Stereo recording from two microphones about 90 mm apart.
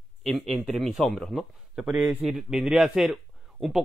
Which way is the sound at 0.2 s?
Centre (ahead or behind).